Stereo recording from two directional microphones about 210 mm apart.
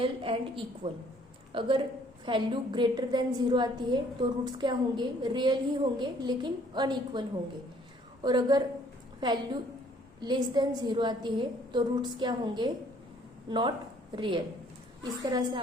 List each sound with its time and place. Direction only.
0.0 s a woman's voice: 25° right (ahead or behind)